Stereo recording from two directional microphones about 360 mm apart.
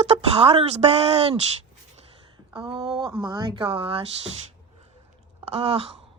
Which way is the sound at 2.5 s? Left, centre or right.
Centre.